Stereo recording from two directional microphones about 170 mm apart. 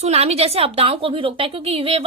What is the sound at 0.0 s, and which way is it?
A woman's voice, 40° right (ahead or behind).